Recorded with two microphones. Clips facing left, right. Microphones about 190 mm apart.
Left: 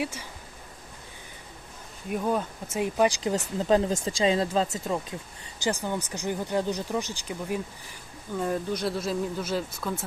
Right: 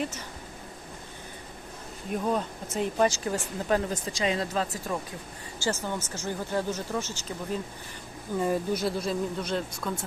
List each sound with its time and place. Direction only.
0.0 s speech: 10° left (ahead or behind)
2.1 s speech: 5° left (ahead or behind)
3.7 s speech: 25° left (ahead or behind)
8.4 s speech: 5° right (ahead or behind)